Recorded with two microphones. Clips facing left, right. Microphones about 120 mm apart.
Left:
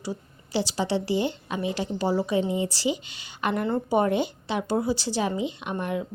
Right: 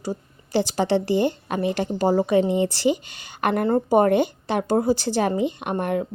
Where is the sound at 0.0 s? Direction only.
45° right (ahead or behind).